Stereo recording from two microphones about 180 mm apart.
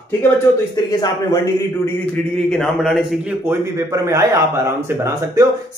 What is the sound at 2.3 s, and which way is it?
A man's voice, 5° left (ahead or behind).